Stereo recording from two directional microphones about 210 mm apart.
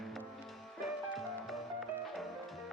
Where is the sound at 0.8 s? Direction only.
Centre (ahead or behind).